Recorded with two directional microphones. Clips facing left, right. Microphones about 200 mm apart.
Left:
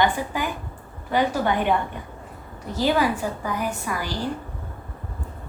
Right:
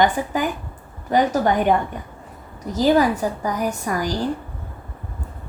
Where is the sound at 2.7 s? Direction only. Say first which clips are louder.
Right 5 dB; 40° right (ahead or behind).